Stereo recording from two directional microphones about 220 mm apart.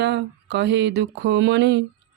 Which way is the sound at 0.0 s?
50° right (ahead or behind).